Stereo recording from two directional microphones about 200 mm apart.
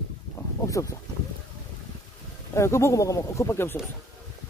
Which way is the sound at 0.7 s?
15° left (ahead or behind).